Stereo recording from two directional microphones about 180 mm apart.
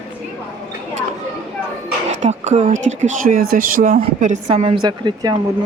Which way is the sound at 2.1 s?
40° right (ahead or behind).